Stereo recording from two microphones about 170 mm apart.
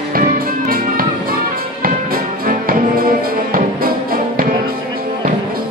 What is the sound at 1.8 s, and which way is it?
Music, 55° right (ahead or behind).